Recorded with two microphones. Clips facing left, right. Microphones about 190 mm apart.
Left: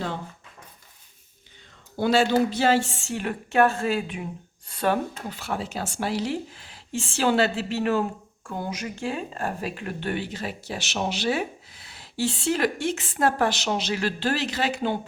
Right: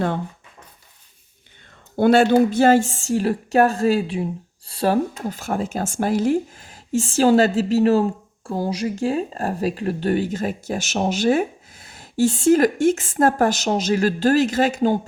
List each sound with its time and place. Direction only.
2.0 s speech: 55° right (ahead or behind)